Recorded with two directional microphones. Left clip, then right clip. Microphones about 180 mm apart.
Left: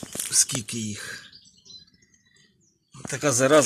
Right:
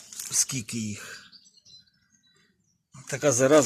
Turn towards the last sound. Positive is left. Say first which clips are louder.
# left 1 dB
turn(degrees=-10)  # may be behind; listen again after turning